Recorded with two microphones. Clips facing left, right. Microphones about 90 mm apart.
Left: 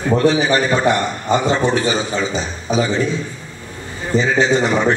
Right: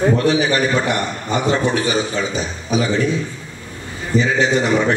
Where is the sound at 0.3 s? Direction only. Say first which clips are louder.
Left 1 dB; 30° left (ahead or behind).